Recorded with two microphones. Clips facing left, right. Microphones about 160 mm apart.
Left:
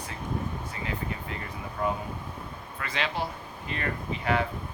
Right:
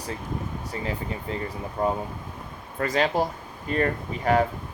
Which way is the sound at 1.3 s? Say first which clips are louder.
Right 6 dB; 30° right (ahead or behind).